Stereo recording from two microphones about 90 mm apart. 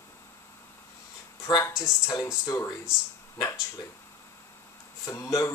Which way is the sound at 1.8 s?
40° left (ahead or behind).